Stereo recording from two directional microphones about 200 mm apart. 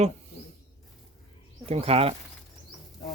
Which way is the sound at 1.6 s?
30° right (ahead or behind).